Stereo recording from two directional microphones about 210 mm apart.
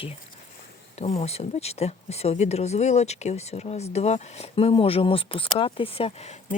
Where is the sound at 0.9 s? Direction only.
30° left (ahead or behind).